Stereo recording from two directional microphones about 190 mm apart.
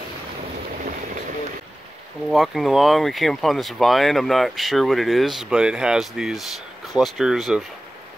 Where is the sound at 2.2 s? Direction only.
Centre (ahead or behind).